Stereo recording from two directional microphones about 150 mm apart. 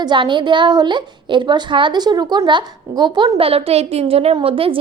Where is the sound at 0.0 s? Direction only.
30° right (ahead or behind).